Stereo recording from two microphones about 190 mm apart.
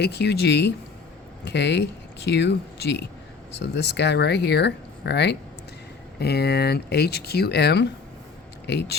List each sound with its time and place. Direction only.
0.0 s speech: 60° left (ahead or behind)